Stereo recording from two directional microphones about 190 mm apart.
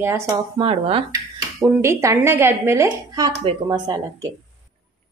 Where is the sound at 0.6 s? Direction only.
30° right (ahead or behind).